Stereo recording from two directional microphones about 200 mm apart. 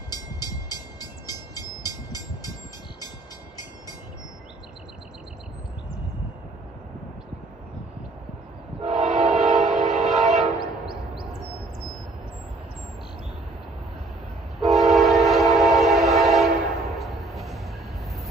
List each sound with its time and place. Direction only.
0.1 s train: 20° left (ahead or behind)
8.9 s train: centre (ahead or behind)
14.6 s train: centre (ahead or behind)